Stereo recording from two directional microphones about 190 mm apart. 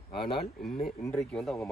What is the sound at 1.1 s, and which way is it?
Speech, 5° left (ahead or behind).